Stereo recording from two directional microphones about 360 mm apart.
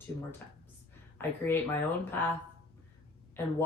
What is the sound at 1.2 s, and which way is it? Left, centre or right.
Speech, centre.